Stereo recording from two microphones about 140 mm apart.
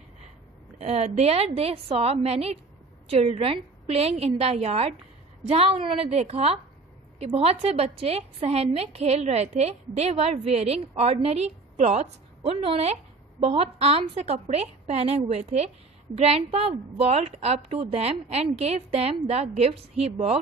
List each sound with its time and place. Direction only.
0.7 s a woman's voice: 50° right (ahead or behind)